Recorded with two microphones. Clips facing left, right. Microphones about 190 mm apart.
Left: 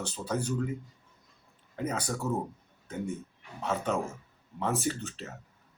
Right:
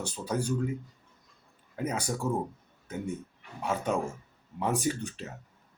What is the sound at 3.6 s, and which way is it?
Speech, 10° right (ahead or behind).